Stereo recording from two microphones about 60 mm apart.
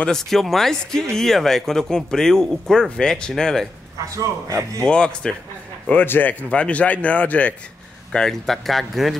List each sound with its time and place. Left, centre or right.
0.0 s speech: centre
4.1 s a man's voice: right
4.8 s speech: centre
5.9 s speech: left
6.5 s speech: left
8.1 s speech: centre